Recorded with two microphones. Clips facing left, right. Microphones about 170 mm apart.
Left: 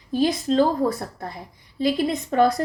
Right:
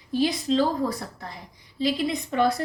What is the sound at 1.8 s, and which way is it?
Speech, 50° left (ahead or behind).